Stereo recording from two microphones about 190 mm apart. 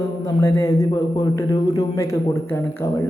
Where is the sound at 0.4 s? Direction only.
15° left (ahead or behind).